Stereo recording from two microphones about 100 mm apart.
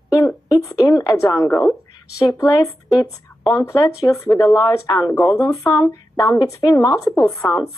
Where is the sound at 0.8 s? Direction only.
35° left (ahead or behind).